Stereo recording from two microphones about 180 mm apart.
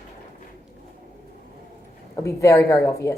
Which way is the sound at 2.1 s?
15° left (ahead or behind).